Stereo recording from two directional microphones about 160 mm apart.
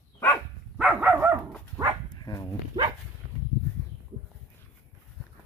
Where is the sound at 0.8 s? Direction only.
5° right (ahead or behind).